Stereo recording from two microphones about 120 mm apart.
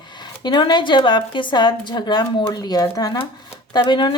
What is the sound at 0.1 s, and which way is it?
Speech, 40° left (ahead or behind).